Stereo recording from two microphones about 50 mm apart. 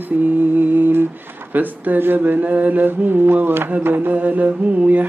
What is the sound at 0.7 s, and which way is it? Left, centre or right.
Humming, right.